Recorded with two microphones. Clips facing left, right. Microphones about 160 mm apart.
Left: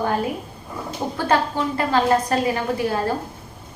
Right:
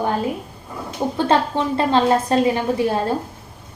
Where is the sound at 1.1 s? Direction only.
25° right (ahead or behind).